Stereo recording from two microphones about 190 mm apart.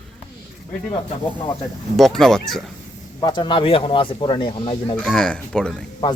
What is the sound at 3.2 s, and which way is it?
Speech, 25° left (ahead or behind).